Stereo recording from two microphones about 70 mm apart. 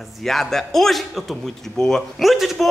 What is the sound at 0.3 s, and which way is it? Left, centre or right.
Speech, centre.